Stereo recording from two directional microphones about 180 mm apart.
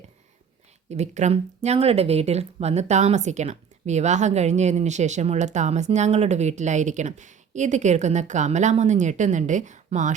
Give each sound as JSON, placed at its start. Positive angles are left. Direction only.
{"t": 0.9, "sound": "speech", "side_deg": -40}